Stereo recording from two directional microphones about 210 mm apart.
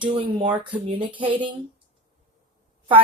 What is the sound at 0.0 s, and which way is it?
Speech, 25° right (ahead or behind).